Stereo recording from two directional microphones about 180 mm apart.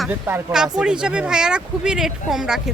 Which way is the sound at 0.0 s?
10° right (ahead or behind).